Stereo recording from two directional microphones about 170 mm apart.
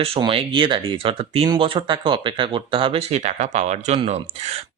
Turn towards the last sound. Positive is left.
turn(degrees=-40)  # may be behind; listen again after turning